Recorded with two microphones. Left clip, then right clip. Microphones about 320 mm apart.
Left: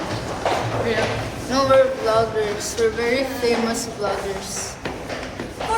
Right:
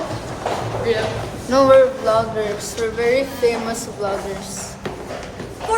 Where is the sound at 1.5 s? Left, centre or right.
Centre.